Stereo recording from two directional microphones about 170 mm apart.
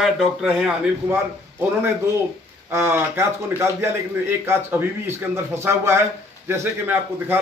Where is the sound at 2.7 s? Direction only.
15° right (ahead or behind).